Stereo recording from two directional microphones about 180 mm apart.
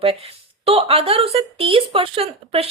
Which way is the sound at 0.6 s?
35° right (ahead or behind).